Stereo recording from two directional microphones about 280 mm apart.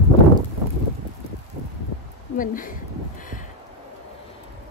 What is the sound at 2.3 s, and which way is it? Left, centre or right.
Speech, left.